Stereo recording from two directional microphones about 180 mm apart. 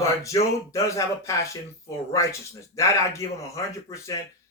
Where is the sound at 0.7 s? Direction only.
15° left (ahead or behind).